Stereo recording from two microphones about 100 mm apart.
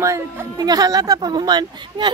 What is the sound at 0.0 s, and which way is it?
Speech, 35° right (ahead or behind).